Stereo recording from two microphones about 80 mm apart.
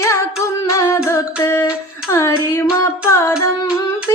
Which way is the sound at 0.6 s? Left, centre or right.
Left.